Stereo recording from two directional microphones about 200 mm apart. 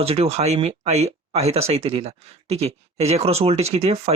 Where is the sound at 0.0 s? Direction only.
30° right (ahead or behind).